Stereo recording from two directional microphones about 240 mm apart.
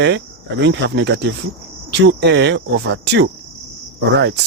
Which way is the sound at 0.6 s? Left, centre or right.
Right.